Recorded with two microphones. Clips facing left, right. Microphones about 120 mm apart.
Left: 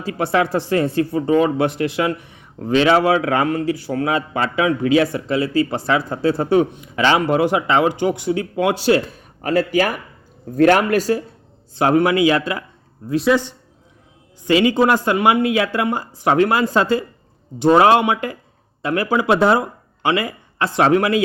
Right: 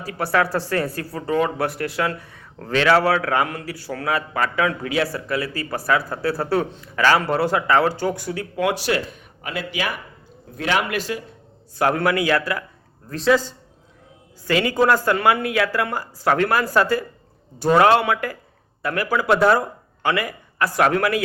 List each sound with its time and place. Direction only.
0.0 s speech: 20° left (ahead or behind)
9.4 s speech: 40° left (ahead or behind)
11.7 s speech: 25° left (ahead or behind)
13.1 s speech: 5° left (ahead or behind)
13.3 s speech: 20° left (ahead or behind)